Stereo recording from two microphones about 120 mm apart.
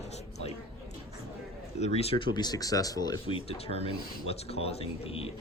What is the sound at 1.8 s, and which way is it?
Speech, 60° left (ahead or behind).